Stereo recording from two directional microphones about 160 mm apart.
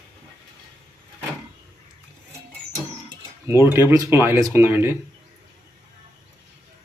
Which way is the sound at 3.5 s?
15° right (ahead or behind).